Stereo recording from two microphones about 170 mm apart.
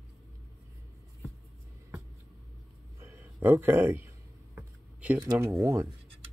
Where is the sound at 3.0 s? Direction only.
15° right (ahead or behind).